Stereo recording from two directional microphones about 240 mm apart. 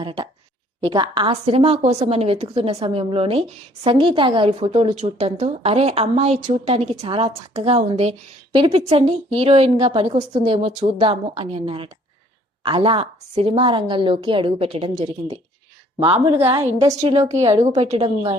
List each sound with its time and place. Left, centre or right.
0.0 s a woman's voice: right
17.2 s a woman's voice: right